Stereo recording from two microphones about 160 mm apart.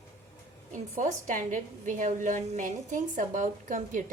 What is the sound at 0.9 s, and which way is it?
Speech, 55° right (ahead or behind).